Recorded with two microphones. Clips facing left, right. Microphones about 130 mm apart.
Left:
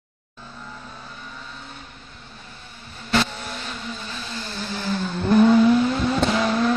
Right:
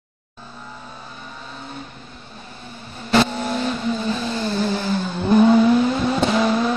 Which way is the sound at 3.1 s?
20° right (ahead or behind).